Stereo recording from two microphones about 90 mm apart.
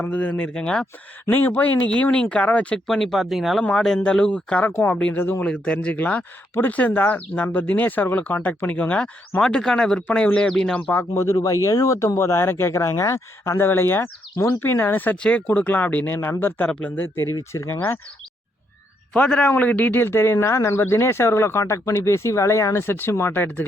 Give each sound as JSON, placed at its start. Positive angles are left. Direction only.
{"t": 0.0, "sound": "speech", "side_deg": 15}
{"t": 5.5, "sound": "speech", "side_deg": 15}
{"t": 11.1, "sound": "speech", "side_deg": 35}
{"t": 17.3, "sound": "speech", "side_deg": 35}
{"t": 19.1, "sound": "speech", "side_deg": 10}